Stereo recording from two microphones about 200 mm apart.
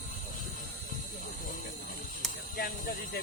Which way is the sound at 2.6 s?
50° left (ahead or behind).